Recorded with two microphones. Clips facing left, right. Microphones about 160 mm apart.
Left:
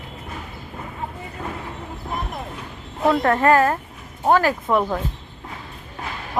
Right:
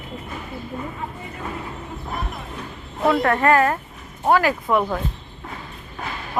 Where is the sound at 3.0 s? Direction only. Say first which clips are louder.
Left 1 dB; centre (ahead or behind).